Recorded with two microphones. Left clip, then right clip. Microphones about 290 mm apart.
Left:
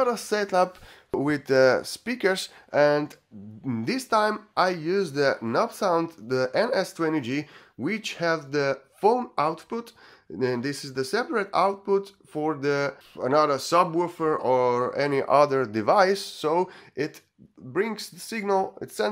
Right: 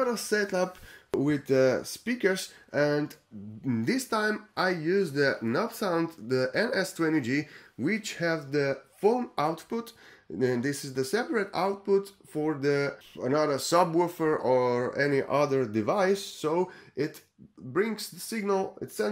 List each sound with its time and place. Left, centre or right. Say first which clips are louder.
0.0 s speech: left 3 dB; centre